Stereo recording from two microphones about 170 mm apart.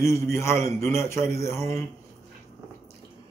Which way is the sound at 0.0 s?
15° left (ahead or behind).